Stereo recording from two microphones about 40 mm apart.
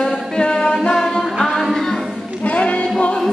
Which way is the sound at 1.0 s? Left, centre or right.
Centre.